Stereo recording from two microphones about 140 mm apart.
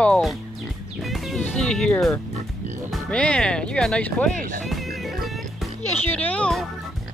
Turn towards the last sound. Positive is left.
turn(degrees=5)  # may be behind; listen again after turning